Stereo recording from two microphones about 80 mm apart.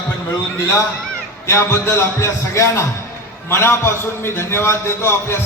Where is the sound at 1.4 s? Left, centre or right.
Left.